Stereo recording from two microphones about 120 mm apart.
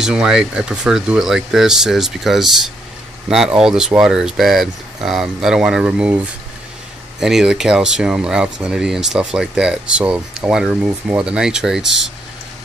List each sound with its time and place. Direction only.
0.0 s speech: 5° right (ahead or behind)